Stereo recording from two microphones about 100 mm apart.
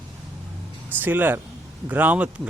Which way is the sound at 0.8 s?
20° right (ahead or behind).